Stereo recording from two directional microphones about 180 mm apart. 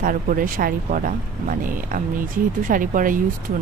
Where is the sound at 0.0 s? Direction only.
50° right (ahead or behind).